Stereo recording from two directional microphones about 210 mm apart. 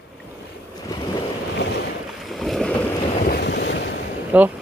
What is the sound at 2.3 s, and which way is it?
Boat, centre (ahead or behind).